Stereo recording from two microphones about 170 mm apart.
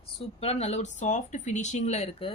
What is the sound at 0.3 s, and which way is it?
Speech, 35° left (ahead or behind).